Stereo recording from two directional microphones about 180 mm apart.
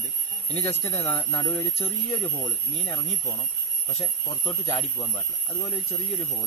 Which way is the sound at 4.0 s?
35° left (ahead or behind).